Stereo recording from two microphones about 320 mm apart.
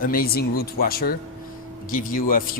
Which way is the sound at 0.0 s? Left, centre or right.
Left.